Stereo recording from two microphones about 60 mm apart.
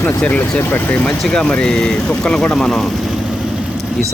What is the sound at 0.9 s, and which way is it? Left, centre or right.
Speech, left.